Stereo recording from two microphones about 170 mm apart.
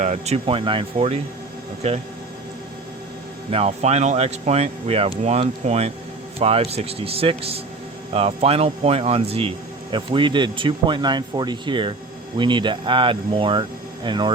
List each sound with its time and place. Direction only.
0.0 s speech: 40° right (ahead or behind)
3.5 s speech: 35° right (ahead or behind)